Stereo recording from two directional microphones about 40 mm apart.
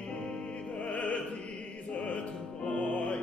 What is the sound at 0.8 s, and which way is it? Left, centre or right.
Opera, left.